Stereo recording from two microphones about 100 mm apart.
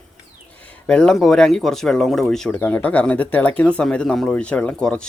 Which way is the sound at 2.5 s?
15° left (ahead or behind).